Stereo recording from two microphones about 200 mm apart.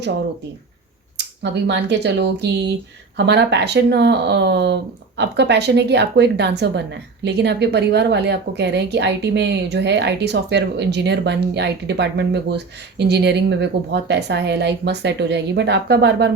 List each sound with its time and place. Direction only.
1.1 s speech: 60° right (ahead or behind)